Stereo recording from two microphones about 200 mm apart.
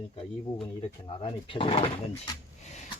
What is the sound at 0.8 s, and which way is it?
Speech, 25° left (ahead or behind).